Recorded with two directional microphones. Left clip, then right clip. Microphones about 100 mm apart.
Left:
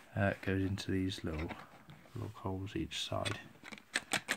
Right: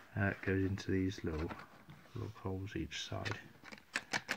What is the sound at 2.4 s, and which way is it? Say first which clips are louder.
Speech: left 3 dB; 25° left (ahead or behind).